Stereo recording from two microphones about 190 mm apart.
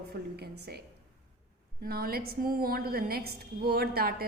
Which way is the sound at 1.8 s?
50° right (ahead or behind).